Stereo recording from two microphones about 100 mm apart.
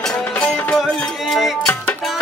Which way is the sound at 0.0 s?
10° left (ahead or behind).